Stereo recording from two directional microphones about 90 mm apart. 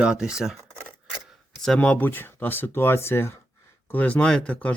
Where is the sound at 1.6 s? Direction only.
10° left (ahead or behind).